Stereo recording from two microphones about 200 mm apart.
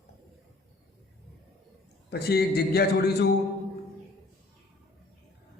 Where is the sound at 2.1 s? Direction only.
55° left (ahead or behind).